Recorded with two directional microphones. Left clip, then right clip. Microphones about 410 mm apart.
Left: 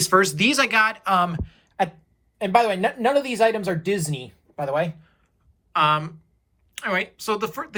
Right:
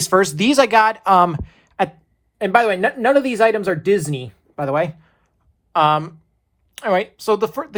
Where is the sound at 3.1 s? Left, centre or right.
Right.